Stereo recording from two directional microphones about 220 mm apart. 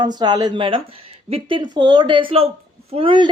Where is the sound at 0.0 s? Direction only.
20° right (ahead or behind).